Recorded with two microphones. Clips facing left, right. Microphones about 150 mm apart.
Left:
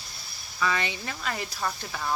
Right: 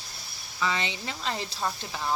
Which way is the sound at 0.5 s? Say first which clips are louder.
Left 1 dB; 20° right (ahead or behind).